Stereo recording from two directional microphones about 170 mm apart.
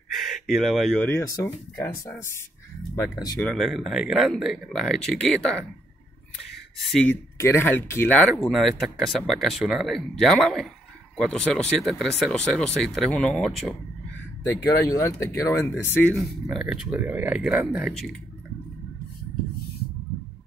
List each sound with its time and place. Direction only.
0.1 s speech: centre (ahead or behind); by 3.3 s 20° left (ahead or behind)
3.3 s speech: 5° left (ahead or behind)
6.9 s speech: 5° left (ahead or behind)
7.3 s speech: 15° left (ahead or behind)
14.4 s speech: 20° left (ahead or behind); by 18.1 s centre (ahead or behind)